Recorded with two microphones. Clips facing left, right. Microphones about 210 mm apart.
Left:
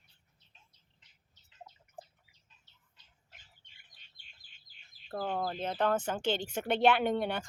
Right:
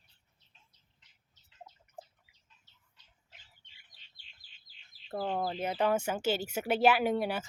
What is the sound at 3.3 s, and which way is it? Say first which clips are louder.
Bird: even; 50° left (ahead or behind).